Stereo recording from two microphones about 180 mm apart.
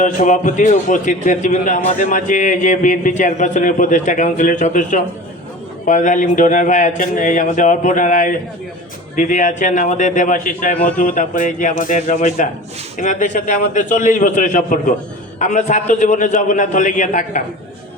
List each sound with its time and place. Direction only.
0.0 s a man's voice: 45° left (ahead or behind)